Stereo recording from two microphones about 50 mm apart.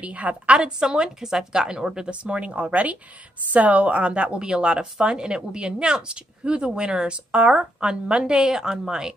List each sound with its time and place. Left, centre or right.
0.0 s a woman's voice: right; by 9.1 s centre